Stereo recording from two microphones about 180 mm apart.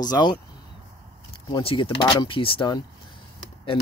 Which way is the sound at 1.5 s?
30° left (ahead or behind).